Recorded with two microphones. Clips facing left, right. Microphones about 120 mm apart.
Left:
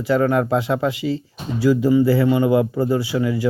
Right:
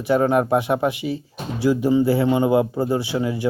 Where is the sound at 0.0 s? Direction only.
20° right (ahead or behind).